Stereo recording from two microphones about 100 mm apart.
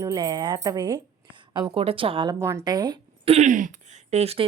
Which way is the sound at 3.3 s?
80° right.